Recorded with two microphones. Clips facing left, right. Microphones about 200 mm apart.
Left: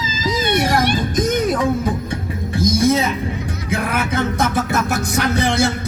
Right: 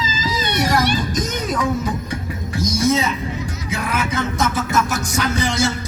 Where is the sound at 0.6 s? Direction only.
55° left (ahead or behind).